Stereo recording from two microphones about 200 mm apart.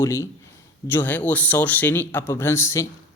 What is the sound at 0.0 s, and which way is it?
Speech, 15° left (ahead or behind).